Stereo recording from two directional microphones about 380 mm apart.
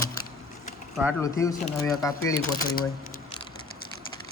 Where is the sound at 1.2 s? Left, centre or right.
Centre.